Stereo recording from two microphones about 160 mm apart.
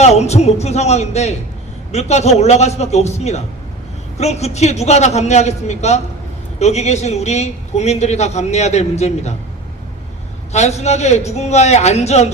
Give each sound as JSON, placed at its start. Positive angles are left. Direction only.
{"t": 0.0, "sound": "a man's voice", "side_deg": 45}
{"t": 10.5, "sound": "a man's voice", "side_deg": 45}